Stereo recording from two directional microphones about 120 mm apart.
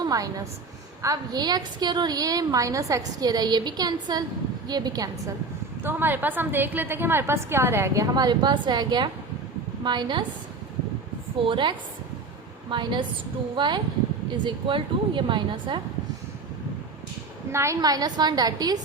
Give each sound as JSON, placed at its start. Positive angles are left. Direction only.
{"t": 0.0, "sound": "a woman's voice", "side_deg": -30}
{"t": 5.8, "sound": "a woman's voice", "side_deg": -15}
{"t": 11.4, "sound": "a woman's voice", "side_deg": -40}
{"t": 12.7, "sound": "a woman's voice", "side_deg": -40}
{"t": 17.5, "sound": "a woman's voice", "side_deg": -20}